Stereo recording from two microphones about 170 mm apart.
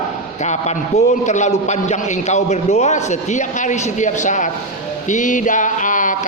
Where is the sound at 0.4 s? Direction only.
40° left (ahead or behind).